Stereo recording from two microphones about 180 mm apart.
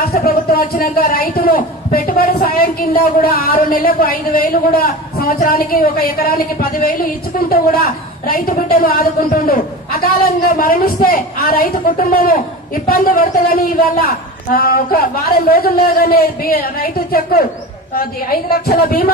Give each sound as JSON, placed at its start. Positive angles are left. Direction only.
{"t": 0.0, "sound": "a man's voice", "side_deg": 55}